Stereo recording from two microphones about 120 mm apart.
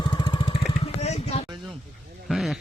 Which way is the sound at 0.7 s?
60° left (ahead or behind).